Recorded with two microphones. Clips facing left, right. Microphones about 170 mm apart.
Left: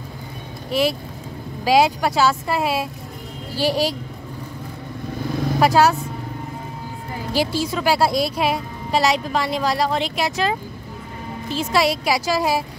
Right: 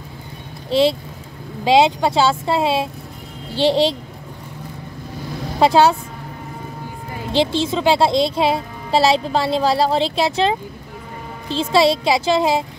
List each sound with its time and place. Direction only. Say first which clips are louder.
0.7 s a woman's voice: right 5 dB; 25° right (ahead or behind)
5.6 s a woman's voice: right 3 dB; 25° right (ahead or behind)
7.3 s a woman's voice: right 4 dB; 25° right (ahead or behind)